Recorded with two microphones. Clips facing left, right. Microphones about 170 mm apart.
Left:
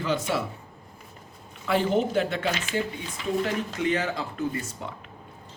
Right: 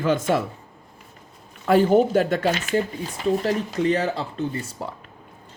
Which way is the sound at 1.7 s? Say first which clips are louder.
Right 7 dB; 45° right (ahead or behind).